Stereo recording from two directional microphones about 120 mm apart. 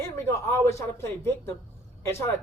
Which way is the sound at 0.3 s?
25° left (ahead or behind).